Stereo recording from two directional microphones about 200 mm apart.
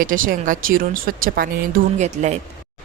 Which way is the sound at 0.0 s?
45° right (ahead or behind).